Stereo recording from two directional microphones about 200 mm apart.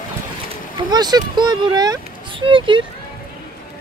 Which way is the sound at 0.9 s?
20° right (ahead or behind).